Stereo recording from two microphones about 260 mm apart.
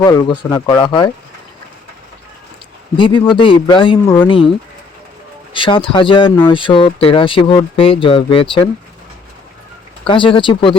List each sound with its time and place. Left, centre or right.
0.0 s speech: centre
3.0 s speech: centre
5.5 s speech: centre
10.1 s speech: centre